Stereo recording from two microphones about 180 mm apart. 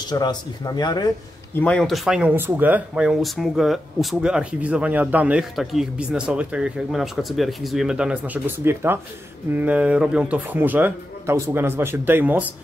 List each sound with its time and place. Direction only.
0.0 s speech: 20° left (ahead or behind)
1.5 s speech: 5° left (ahead or behind); by 12.5 s 10° right (ahead or behind)